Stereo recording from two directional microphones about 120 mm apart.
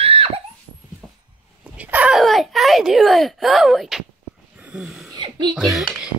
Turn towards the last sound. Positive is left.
turn(degrees=0)  # may be behind; listen again after turning